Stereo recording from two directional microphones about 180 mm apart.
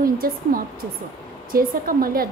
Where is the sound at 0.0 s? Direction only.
55° right (ahead or behind).